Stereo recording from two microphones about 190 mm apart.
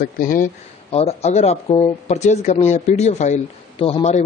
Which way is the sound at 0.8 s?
30° left (ahead or behind).